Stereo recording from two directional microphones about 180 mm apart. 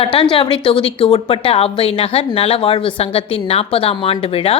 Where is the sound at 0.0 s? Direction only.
30° left (ahead or behind).